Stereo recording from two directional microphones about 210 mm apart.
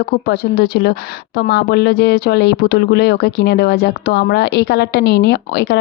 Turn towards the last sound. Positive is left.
turn(degrees=50)  # may be behind; listen again after turning